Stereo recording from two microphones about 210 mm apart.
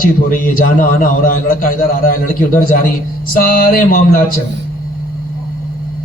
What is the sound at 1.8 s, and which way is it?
A man's voice, 40° left (ahead or behind).